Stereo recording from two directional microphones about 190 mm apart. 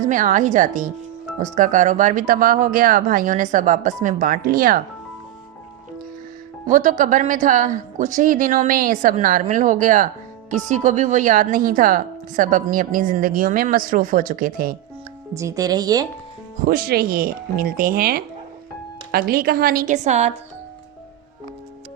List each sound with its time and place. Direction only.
0.1 s a woman's voice: 45° right (ahead or behind)
6.7 s a woman's voice: 45° right (ahead or behind)
15.4 s speech: 15° right (ahead or behind)
16.6 s a woman's voice: 50° right (ahead or behind)
19.3 s a woman's voice: 55° right (ahead or behind); by 20.3 s 35° right (ahead or behind)